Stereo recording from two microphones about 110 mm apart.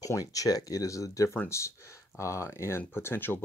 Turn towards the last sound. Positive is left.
turn(degrees=20)  # may be behind; listen again after turning